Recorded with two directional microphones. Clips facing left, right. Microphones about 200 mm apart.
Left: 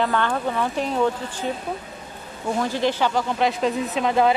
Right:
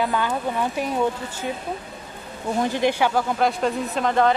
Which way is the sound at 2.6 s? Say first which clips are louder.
Right 2 dB; 15° right (ahead or behind).